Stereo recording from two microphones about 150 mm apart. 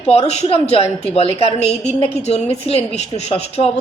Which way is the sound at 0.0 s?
45° left (ahead or behind).